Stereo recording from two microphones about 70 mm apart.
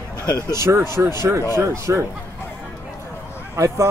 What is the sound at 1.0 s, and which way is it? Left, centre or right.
Speech, right.